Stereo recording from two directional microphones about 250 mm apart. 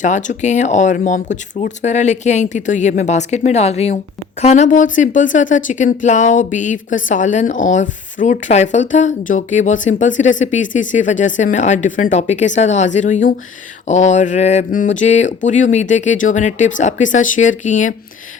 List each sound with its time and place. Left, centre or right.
0.0 s speech: left